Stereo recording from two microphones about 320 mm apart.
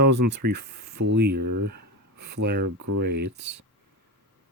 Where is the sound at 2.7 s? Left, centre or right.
Right.